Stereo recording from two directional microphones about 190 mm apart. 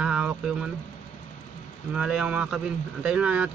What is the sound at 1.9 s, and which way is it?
Speech, 5° right (ahead or behind).